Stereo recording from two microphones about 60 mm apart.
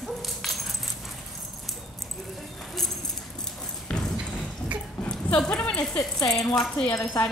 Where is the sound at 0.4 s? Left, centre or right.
Centre.